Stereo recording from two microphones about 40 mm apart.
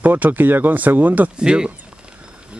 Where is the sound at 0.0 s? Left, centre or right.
Right.